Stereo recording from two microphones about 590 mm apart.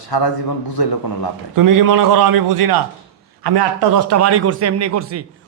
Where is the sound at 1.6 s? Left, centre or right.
Right.